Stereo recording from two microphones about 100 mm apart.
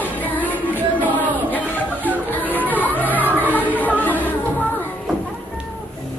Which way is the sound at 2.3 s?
15° left (ahead or behind).